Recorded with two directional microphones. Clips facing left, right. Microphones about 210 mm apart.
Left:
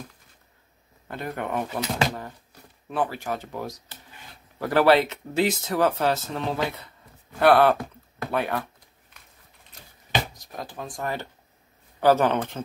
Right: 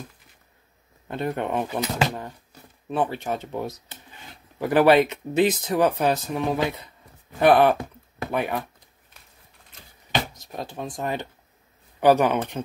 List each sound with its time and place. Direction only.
1.0 s speech: 25° right (ahead or behind)
10.3 s speech: 25° right (ahead or behind)